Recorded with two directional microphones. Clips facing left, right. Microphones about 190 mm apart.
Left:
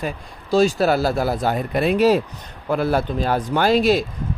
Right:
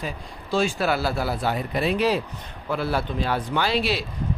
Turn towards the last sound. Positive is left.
turn(degrees=45)  # may be behind; listen again after turning